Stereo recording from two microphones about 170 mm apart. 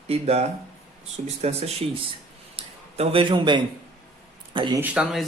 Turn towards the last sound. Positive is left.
turn(degrees=-5)  # may be behind; listen again after turning